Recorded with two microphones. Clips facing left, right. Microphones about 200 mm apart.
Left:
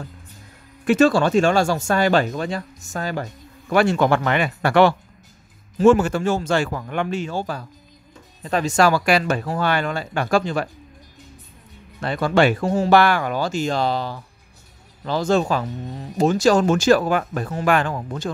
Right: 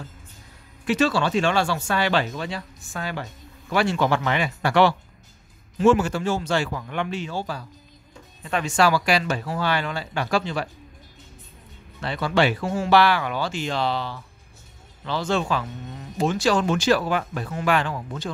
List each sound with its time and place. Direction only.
0.8 s speech: 50° left (ahead or behind)
8.4 s speech: 40° left (ahead or behind)
12.0 s speech: 50° left (ahead or behind)